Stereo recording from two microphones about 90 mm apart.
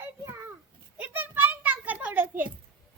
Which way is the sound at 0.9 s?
20° right (ahead or behind).